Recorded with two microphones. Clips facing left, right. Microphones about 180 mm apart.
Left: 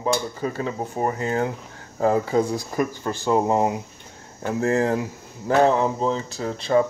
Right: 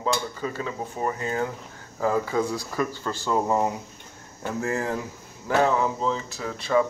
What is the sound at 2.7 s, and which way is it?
Speech, 20° left (ahead or behind).